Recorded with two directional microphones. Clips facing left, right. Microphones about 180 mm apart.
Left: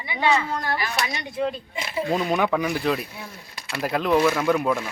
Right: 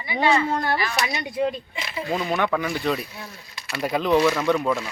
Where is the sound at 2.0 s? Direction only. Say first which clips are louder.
Left 1 dB; 10° left (ahead or behind).